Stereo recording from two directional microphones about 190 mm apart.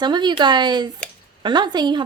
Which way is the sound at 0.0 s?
25° right (ahead or behind).